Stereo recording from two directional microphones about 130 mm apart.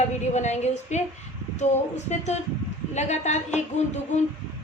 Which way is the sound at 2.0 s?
60° left (ahead or behind).